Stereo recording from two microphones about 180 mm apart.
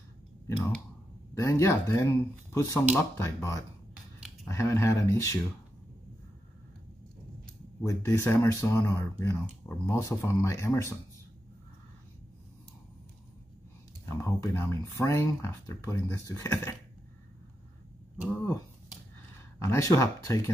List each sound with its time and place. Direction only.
1.4 s speech: 15° left (ahead or behind)
7.8 s speech: 15° left (ahead or behind)
14.0 s speech: 15° left (ahead or behind)
19.6 s speech: 15° left (ahead or behind)